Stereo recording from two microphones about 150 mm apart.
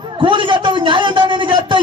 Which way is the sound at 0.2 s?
35° right (ahead or behind).